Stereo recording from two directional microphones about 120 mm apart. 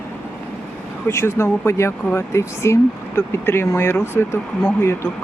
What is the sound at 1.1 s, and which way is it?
Speech, 20° left (ahead or behind).